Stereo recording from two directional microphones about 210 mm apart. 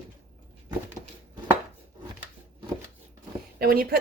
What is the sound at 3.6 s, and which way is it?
Speech, 45° right (ahead or behind).